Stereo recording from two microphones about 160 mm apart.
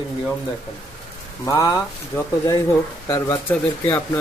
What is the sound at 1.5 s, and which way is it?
Speech, 25° left (ahead or behind).